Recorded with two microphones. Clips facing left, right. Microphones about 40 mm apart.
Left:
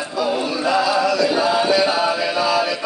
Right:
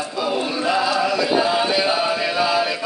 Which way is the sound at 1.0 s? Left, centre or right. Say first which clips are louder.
Left 1 dB; centre.